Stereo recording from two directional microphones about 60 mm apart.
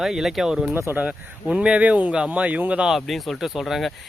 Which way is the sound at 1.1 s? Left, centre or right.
Centre.